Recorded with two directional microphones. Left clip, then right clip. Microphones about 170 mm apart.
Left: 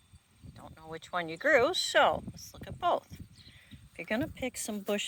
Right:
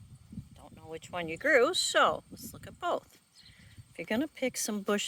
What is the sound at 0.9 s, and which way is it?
Speech, 10° right (ahead or behind).